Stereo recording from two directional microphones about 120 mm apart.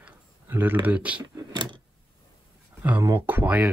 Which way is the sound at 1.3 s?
35° right (ahead or behind).